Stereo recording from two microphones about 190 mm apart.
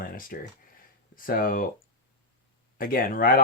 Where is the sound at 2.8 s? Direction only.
50° left (ahead or behind).